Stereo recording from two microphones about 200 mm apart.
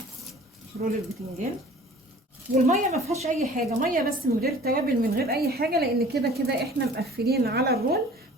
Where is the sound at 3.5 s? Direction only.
45° right (ahead or behind).